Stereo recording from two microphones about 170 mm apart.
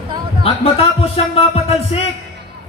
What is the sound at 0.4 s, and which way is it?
Speech, 35° left (ahead or behind).